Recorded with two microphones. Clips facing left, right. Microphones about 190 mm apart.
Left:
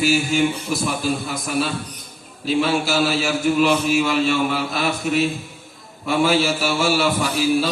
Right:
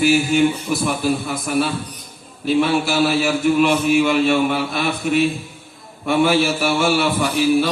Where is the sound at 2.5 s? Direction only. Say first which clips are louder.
Right 2 dB; 60° right (ahead or behind).